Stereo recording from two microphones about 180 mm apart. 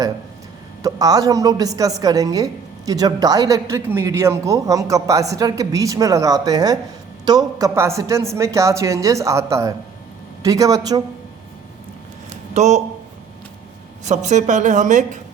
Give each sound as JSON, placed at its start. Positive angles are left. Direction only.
{"t": 0.8, "sound": "a woman's voice", "side_deg": -20}
{"t": 12.5, "sound": "speech", "side_deg": -40}
{"t": 14.0, "sound": "a woman's voice", "side_deg": -40}